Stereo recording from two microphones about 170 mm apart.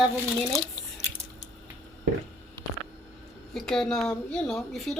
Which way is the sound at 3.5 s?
5° left (ahead or behind).